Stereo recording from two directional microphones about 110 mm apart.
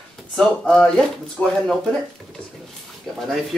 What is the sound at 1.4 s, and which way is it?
Speech, 15° left (ahead or behind).